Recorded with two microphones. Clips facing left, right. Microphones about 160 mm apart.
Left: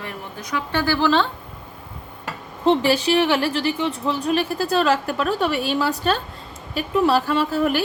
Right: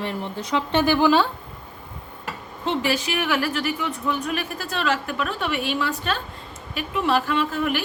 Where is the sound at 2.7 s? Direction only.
30° left (ahead or behind).